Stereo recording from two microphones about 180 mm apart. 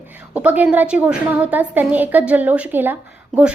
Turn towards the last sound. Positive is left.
turn(degrees=-10)  # may be behind; listen again after turning